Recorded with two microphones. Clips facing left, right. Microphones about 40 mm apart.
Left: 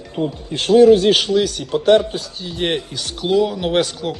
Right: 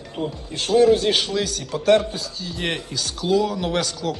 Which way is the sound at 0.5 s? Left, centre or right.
Left.